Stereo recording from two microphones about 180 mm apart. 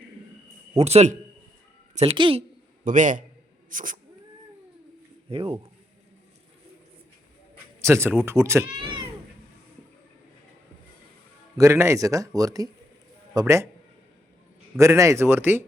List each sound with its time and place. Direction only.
0.8 s a woman's voice: 35° right (ahead or behind)
2.8 s a man's voice: 45° right (ahead or behind)
3.7 s cat: 45° right (ahead or behind)
5.3 s a woman's voice: 30° right (ahead or behind)
7.8 s speech: 15° right (ahead or behind)
8.8 s cat: 25° right (ahead or behind)
11.5 s speech: 15° right (ahead or behind)
14.8 s speech: 15° right (ahead or behind)